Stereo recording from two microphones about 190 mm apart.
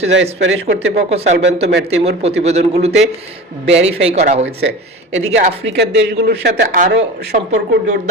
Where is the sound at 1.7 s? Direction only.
65° right (ahead or behind).